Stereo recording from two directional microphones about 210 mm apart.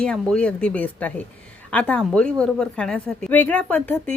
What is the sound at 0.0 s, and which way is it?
A woman's voice, 5° left (ahead or behind).